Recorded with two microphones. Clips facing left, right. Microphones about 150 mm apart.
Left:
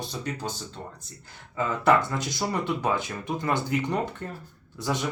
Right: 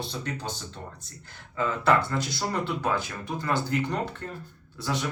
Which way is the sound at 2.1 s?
15° left (ahead or behind).